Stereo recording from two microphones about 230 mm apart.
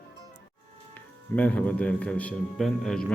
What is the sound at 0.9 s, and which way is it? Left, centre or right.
Speech, centre.